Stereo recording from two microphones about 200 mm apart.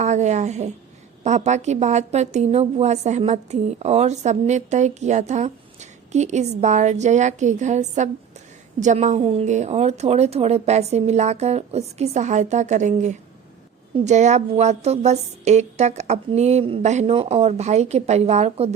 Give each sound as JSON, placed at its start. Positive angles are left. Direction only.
{"t": 0.0, "sound": "a woman's voice", "side_deg": -35}